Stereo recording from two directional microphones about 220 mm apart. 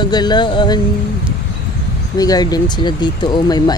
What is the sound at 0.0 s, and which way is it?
Speech, 20° left (ahead or behind).